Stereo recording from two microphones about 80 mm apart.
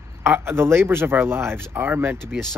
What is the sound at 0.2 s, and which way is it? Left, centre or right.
Speech, right.